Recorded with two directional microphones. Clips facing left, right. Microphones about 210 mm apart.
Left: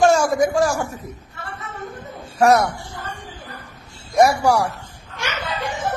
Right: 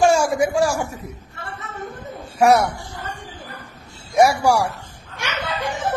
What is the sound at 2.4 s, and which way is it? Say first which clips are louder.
Speech: even; 10° right (ahead or behind).